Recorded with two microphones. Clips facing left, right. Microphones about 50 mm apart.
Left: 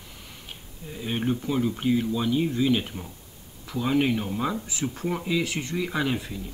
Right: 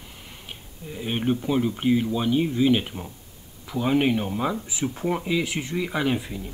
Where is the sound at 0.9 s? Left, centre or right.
Right.